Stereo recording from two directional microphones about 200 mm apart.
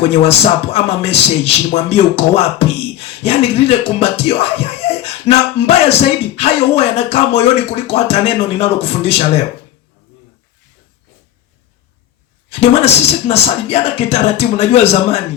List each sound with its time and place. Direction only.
0.1 s a man's voice: 30° left (ahead or behind)
12.5 s a man's voice: 30° left (ahead or behind)